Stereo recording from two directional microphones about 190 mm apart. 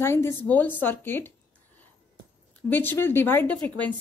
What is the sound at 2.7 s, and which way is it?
Speech, 10° left (ahead or behind).